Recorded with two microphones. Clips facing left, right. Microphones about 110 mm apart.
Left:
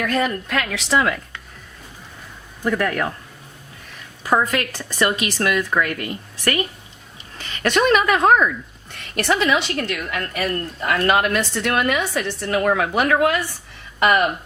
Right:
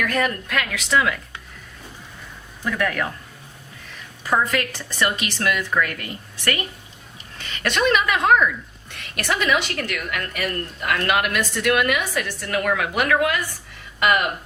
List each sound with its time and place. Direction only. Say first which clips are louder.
0.0 s a woman's voice: left 2 dB; 25° left (ahead or behind)
2.6 s a woman's voice: left 3 dB; 35° left (ahead or behind)
4.3 s a woman's voice: left 2 dB; 40° left (ahead or behind)
7.3 s a woman's voice: left 4 dB; 40° left (ahead or behind)
9.1 s a woman's voice: left 3 dB; 25° left (ahead or behind)